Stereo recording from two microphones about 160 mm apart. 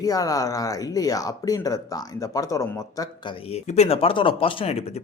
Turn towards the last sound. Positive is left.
turn(degrees=35)  # may be behind; listen again after turning